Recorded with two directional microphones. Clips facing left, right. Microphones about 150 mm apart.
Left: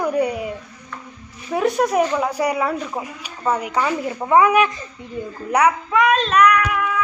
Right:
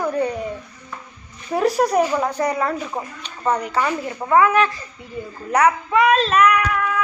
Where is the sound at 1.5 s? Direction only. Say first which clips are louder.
Right 1 dB; centre (ahead or behind).